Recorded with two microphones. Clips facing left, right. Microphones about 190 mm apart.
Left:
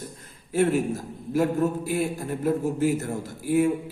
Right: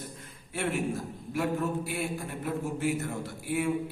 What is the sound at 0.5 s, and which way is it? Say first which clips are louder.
A man's voice: left 8 dB; 40° left (ahead or behind).